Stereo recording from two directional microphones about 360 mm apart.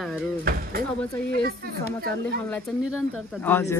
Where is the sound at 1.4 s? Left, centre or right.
Right.